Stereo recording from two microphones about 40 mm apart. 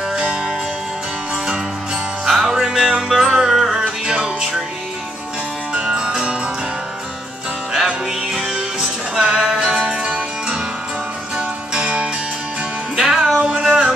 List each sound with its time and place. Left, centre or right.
0.3 s music: centre
2.2 s music: centre
5.9 s music: centre
7.7 s music: centre
11.7 s music: right